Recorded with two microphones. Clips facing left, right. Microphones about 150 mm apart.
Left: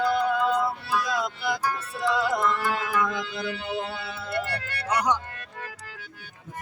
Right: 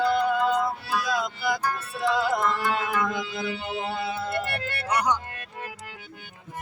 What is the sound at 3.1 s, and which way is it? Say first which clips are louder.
Mantra: right 1 dB; 5° right (ahead or behind).